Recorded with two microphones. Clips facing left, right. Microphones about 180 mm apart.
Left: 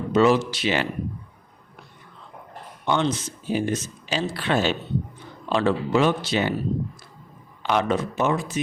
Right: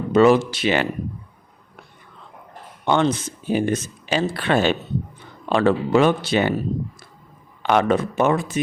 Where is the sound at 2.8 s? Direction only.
55° right (ahead or behind).